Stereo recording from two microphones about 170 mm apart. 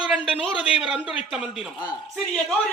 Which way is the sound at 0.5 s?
5° right (ahead or behind).